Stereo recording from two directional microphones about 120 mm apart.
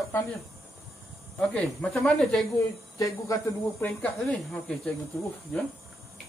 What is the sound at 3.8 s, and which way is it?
Speech, 10° left (ahead or behind).